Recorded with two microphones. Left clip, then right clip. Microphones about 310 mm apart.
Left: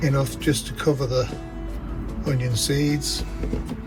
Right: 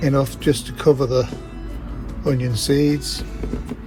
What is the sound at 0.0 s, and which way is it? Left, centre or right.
Speech, centre.